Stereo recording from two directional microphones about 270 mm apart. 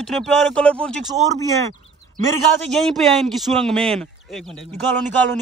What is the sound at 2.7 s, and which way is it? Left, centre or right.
Speech, centre.